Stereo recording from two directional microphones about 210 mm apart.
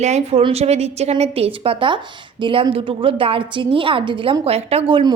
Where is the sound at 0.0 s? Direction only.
30° right (ahead or behind).